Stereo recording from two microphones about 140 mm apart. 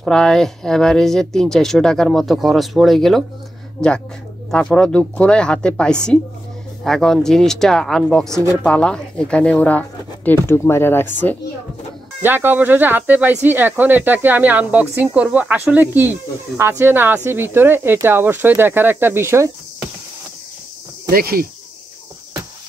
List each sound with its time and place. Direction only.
0.0 s speech: 5° left (ahead or behind)
4.5 s speech: 5° left (ahead or behind)
12.2 s speech: 15° right (ahead or behind)
21.1 s speech: 90° right